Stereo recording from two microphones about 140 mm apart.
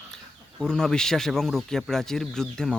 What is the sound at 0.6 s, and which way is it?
Speech, 5° left (ahead or behind).